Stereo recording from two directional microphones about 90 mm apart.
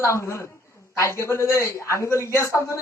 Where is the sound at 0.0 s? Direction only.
30° left (ahead or behind).